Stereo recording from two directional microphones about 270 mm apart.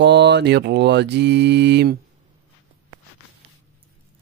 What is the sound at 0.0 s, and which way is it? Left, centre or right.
Mantra, right.